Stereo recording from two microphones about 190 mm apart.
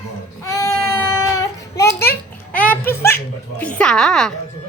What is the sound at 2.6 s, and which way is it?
Music, 10° left (ahead or behind).